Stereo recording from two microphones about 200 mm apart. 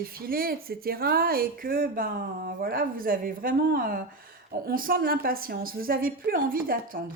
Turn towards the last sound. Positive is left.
turn(degrees=-45)  # may be behind; listen again after turning